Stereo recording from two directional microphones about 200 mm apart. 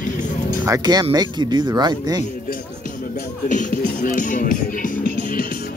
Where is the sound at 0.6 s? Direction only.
20° right (ahead or behind).